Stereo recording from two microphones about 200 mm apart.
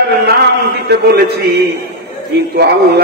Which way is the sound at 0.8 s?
50° right (ahead or behind).